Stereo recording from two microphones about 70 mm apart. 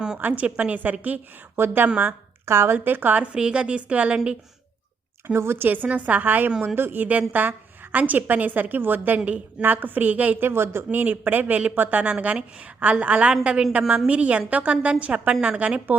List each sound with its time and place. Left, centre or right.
0.2 s a woman's voice: right
3.3 s a woman's voice: centre
5.3 s a woman's voice: right
10.5 s speech: right
10.9 s a woman's voice: right